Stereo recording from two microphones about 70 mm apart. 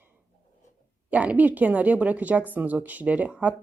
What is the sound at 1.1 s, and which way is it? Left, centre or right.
Speech, right.